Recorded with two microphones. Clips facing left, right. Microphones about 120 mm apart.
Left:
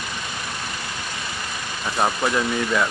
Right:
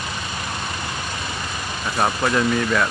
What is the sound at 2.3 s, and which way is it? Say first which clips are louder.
Speech: right 2 dB; 10° left (ahead or behind).